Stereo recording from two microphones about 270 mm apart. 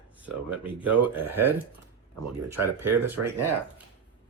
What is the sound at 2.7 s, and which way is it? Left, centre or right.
Speech, centre.